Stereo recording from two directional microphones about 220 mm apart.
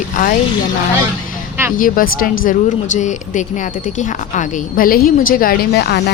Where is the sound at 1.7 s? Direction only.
40° left (ahead or behind).